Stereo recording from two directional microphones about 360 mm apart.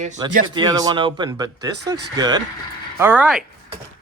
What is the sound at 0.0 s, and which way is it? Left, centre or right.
Speech, centre.